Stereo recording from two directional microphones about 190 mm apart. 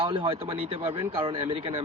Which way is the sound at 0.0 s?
30° right (ahead or behind).